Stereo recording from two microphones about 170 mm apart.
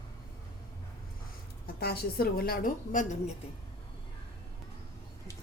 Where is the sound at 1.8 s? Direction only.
70° left (ahead or behind); by 3.3 s 45° left (ahead or behind).